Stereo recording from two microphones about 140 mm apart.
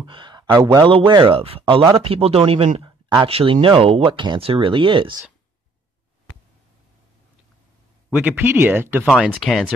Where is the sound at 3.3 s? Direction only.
45° right (ahead or behind).